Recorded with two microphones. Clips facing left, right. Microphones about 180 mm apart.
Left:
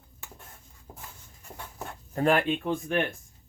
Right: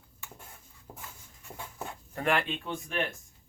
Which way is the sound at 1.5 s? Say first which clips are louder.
Even; 5° right (ahead or behind).